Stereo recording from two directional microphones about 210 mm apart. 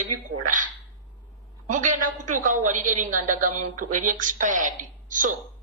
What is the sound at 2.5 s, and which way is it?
A woman's voice, 35° right (ahead or behind).